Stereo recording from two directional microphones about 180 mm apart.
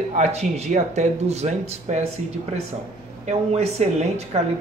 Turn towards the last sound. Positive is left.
turn(degrees=-35)  # may be behind; listen again after turning